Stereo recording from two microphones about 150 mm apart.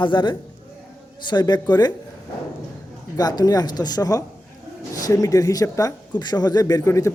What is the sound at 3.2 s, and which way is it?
Speech, 25° left (ahead or behind).